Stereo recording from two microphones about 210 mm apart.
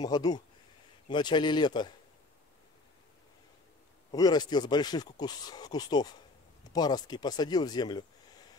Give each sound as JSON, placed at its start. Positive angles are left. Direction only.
{"t": 0.0, "sound": "speech", "side_deg": 20}
{"t": 4.1, "sound": "speech", "side_deg": 20}